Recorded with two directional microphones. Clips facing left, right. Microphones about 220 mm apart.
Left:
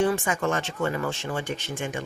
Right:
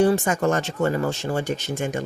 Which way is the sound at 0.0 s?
40° right (ahead or behind).